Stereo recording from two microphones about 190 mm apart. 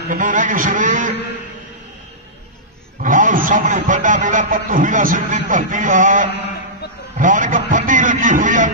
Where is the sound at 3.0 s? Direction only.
45° right (ahead or behind).